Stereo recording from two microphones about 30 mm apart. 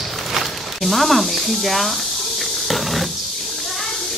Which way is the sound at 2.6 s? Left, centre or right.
Centre.